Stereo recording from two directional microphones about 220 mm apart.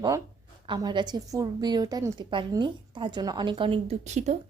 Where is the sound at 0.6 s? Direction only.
20° right (ahead or behind).